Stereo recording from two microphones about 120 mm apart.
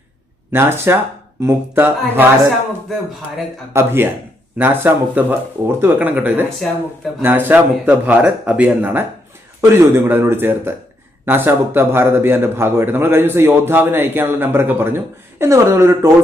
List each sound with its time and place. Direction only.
0.5 s a man's voice: 20° right (ahead or behind)
3.7 s a man's voice: 20° right (ahead or behind)